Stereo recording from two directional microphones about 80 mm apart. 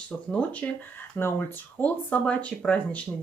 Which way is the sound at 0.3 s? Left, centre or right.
Centre.